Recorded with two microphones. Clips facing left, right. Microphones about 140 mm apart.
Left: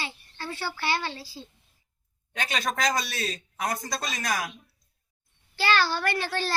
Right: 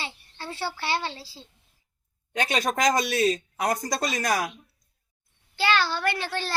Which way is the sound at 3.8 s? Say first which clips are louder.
Right 5 dB; 40° right (ahead or behind).